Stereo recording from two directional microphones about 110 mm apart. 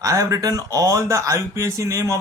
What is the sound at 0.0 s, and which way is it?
Speech, 30° right (ahead or behind).